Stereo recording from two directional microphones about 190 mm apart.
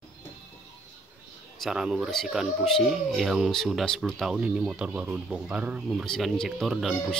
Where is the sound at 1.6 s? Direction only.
5° right (ahead or behind).